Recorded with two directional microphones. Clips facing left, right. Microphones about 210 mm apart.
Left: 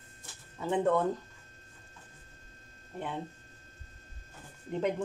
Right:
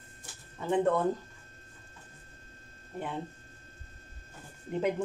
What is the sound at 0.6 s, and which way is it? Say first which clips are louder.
Speech: right 1 dB; centre (ahead or behind).